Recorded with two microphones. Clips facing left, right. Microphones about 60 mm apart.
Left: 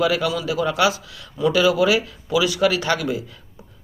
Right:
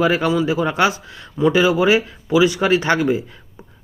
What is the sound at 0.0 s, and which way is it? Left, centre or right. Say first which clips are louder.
Speech: right 4 dB; right.